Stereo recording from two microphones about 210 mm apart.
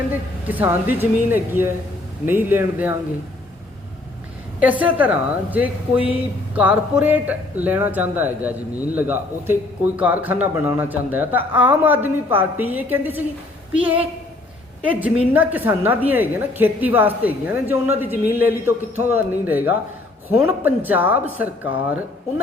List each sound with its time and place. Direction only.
0.1 s a woman's voice: 10° right (ahead or behind)
4.6 s a woman's voice: 5° right (ahead or behind)